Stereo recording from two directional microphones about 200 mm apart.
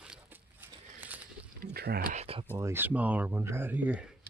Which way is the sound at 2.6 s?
10° right (ahead or behind).